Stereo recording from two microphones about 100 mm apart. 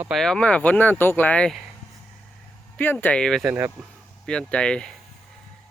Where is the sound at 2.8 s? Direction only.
20° left (ahead or behind).